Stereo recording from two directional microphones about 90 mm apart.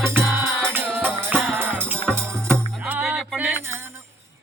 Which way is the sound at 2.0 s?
10° left (ahead or behind).